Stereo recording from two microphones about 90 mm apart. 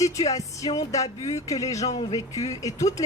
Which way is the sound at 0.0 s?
40° left (ahead or behind).